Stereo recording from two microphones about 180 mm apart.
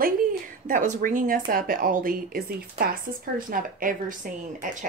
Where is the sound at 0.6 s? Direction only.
45° right (ahead or behind).